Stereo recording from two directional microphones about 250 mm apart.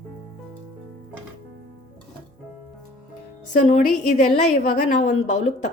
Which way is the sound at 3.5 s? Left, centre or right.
Left.